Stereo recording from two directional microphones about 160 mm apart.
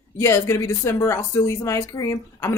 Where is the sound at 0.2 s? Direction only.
15° left (ahead or behind).